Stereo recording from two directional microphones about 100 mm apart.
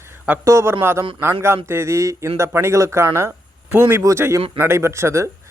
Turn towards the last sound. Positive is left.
turn(degrees=-30)  # may be behind; listen again after turning